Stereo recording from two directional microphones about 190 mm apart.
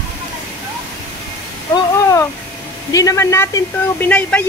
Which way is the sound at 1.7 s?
15° left (ahead or behind).